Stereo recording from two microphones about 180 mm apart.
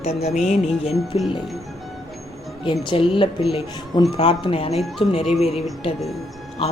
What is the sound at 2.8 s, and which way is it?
Speech, 30° left (ahead or behind).